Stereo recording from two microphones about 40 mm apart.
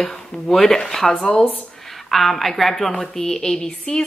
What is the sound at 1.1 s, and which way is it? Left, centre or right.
Speech, left.